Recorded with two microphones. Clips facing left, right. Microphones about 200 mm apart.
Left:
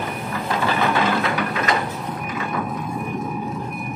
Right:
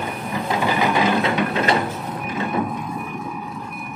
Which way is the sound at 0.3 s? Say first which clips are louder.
Right 2 dB; 20° right (ahead or behind).